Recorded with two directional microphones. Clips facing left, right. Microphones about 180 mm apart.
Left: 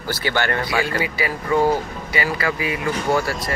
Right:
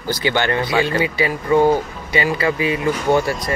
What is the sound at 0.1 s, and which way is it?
Speech, 20° right (ahead or behind).